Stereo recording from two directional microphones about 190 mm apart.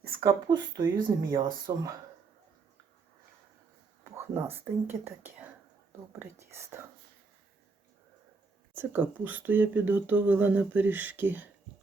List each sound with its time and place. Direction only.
0.2 s speech: 20° right (ahead or behind)
4.0 s speech: 10° right (ahead or behind)
8.7 s speech: 10° right (ahead or behind)